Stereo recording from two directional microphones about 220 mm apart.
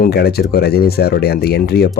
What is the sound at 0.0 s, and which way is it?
Speech, 45° left (ahead or behind).